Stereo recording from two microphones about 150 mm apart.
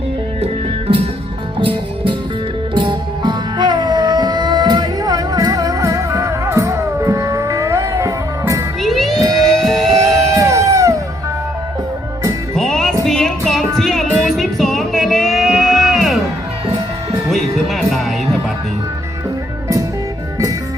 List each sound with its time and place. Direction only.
0.4 s music: 40° right (ahead or behind)
2.7 s music: 30° right (ahead or behind)
8.8 s music: centre (ahead or behind)
10.2 s music: 20° right (ahead or behind)
12.5 s music: 5° left (ahead or behind)
17.3 s music: centre (ahead or behind)